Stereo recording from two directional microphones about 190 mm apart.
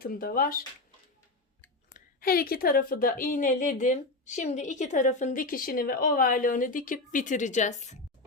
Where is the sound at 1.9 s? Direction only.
50° left (ahead or behind).